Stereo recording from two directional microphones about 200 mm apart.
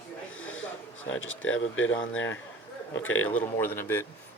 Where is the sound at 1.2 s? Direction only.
75° left (ahead or behind).